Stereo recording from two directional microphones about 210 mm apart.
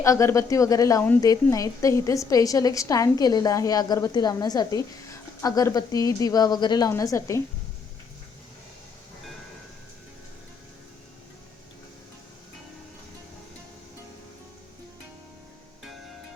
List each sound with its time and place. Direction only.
0.0 s a woman's voice: 15° left (ahead or behind)